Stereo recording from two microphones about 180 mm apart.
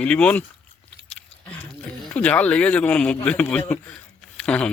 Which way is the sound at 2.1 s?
5° left (ahead or behind).